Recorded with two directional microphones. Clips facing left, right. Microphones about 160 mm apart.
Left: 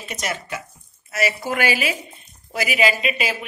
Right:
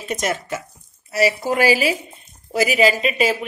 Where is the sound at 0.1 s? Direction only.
45° right (ahead or behind).